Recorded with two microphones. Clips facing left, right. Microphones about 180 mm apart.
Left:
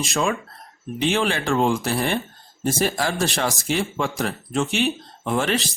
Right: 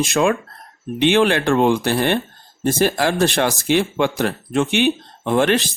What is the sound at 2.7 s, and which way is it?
Speech, 55° right (ahead or behind).